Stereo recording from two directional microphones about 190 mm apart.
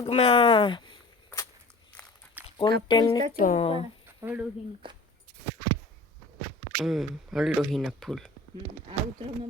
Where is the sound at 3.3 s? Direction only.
45° left (ahead or behind).